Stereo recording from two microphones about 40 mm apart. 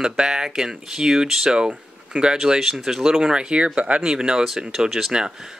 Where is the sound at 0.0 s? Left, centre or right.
Centre.